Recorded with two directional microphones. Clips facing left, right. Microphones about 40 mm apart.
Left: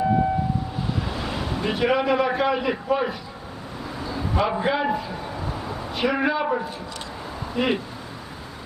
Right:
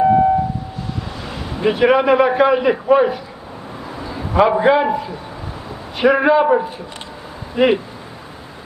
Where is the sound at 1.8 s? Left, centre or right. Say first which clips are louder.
Right 8 dB; right.